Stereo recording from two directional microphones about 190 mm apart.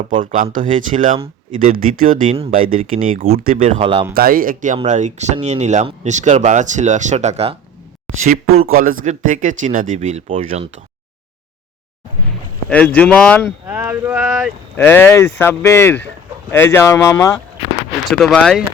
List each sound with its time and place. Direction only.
0.2 s speech: 45° right (ahead or behind)
3.6 s speech: 30° right (ahead or behind)
4.1 s speech: 50° right (ahead or behind); by 10.7 s 30° right (ahead or behind)
12.6 s speech: 10° left (ahead or behind)
13.7 s speech: 10° right (ahead or behind)
14.2 s speech: centre (ahead or behind)
14.8 s speech: 10° left (ahead or behind)
18.1 s speech: centre (ahead or behind)